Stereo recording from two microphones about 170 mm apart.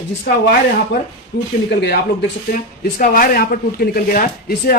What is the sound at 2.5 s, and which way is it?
Speech, 60° left (ahead or behind).